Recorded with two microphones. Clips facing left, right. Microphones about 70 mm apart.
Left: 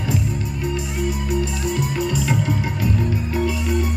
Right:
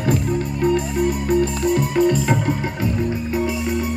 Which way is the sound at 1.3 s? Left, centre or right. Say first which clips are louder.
Right 5 dB; right.